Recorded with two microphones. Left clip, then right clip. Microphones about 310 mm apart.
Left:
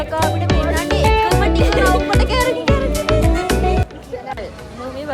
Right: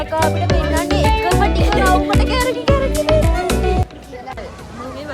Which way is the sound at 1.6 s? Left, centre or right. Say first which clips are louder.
Even; centre.